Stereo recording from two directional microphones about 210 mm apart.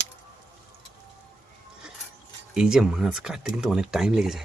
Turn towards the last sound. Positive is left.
turn(degrees=0)  # may be behind; listen again after turning